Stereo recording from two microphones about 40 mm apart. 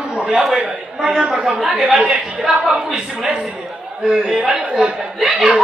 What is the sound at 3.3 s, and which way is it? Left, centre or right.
A man's voice, right.